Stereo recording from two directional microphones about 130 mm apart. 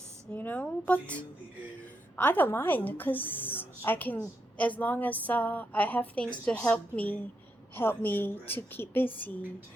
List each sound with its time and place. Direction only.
0.3 s a woman's voice: 10° left (ahead or behind)